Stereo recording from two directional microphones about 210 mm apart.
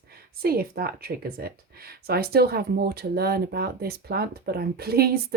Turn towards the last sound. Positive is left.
turn(degrees=-50)  # may be behind; listen again after turning